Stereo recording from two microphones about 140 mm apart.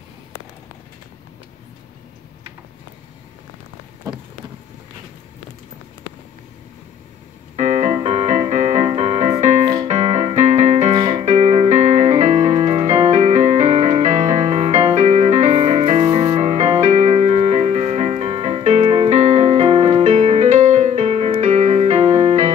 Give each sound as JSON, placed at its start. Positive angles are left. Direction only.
{"t": 7.5, "sound": "keyboard", "side_deg": -55}
{"t": 8.0, "sound": "music", "side_deg": -50}
{"t": 9.8, "sound": "keyboard", "side_deg": -55}
{"t": 11.2, "sound": "music", "side_deg": -55}